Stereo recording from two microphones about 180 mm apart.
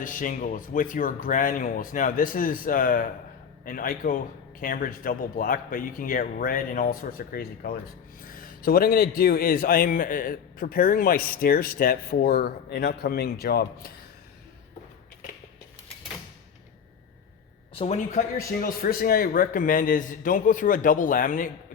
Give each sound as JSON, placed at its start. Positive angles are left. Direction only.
{"t": 0.0, "sound": "speech", "side_deg": 45}
{"t": 17.7, "sound": "speech", "side_deg": 40}
{"t": 18.6, "sound": "speech", "side_deg": 55}